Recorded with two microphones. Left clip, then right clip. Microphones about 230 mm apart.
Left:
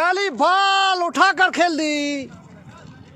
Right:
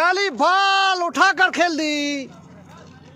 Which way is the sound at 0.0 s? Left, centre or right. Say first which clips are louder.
Even; centre.